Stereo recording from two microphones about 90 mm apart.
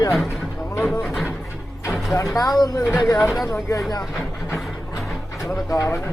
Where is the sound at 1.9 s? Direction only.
Centre (ahead or behind).